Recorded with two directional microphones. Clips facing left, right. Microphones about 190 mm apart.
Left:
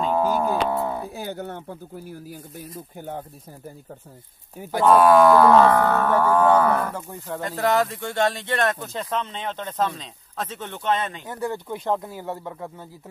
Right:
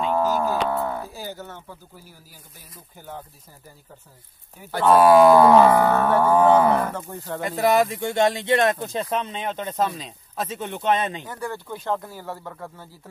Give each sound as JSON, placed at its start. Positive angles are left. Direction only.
{"t": 0.1, "sound": "a sound", "side_deg": 10}
{"t": 1.1, "sound": "speech", "side_deg": 60}
{"t": 4.8, "sound": "speech", "side_deg": -5}
{"t": 5.2, "sound": "speech", "side_deg": -15}
{"t": 6.9, "sound": "speech", "side_deg": 10}
{"t": 7.2, "sound": "speech", "side_deg": -10}
{"t": 11.2, "sound": "speech", "side_deg": 20}